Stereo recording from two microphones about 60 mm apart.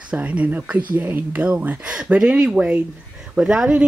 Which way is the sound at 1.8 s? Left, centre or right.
Centre.